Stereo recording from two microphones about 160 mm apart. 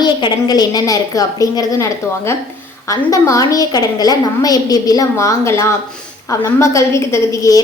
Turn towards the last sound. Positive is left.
turn(degrees=20)  # may be behind; listen again after turning